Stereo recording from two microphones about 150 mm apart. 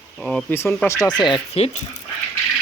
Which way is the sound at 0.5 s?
15° left (ahead or behind).